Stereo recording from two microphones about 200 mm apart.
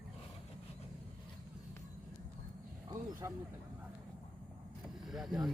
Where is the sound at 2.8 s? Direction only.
15° right (ahead or behind).